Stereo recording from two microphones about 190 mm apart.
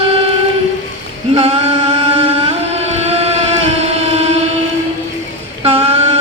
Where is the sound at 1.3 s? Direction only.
35° right (ahead or behind).